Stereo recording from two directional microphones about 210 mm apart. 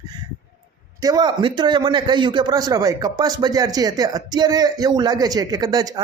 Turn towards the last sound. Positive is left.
turn(degrees=-20)  # may be behind; listen again after turning